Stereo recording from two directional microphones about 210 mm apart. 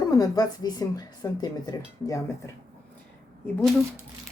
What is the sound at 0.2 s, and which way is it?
Speech, 15° left (ahead or behind).